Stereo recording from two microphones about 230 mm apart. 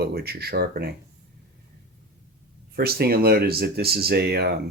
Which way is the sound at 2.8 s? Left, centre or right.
Right.